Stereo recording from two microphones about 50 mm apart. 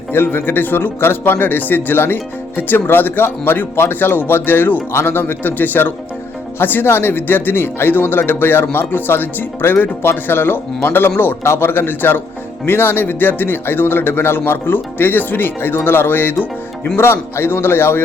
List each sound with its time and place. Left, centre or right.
0.1 s speech: left
17.0 s speech: left